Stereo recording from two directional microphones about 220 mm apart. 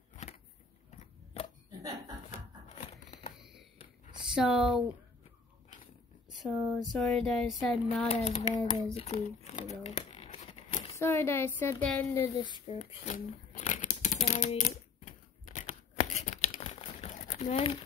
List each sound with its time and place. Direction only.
0.1 s vehicle: 30° left (ahead or behind)
2.7 s a sound: 30° left (ahead or behind)
3.3 s a sound: centre (ahead or behind)
4.4 s speech: centre (ahead or behind)
6.4 s speech: centre (ahead or behind)
8.1 s hands: 30° left (ahead or behind)
8.9 s crumpling: 30° left (ahead or behind)
11.0 s a woman's voice: 10° left (ahead or behind)
12.6 s crumpling: 30° left (ahead or behind)